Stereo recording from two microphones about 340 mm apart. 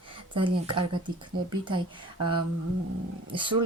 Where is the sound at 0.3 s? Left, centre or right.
Centre.